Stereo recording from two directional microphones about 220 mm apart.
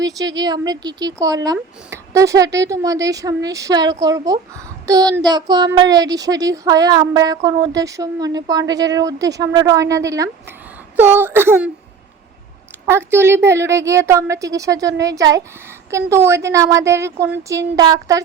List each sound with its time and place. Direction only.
0.0 s a child's voice: 15° right (ahead or behind)
12.8 s a child's voice: 10° right (ahead or behind)